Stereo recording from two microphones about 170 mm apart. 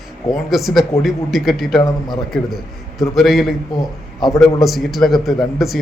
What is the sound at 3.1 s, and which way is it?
A man's voice, centre (ahead or behind).